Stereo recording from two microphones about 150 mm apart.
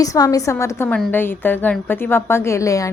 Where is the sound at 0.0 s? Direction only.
20° left (ahead or behind).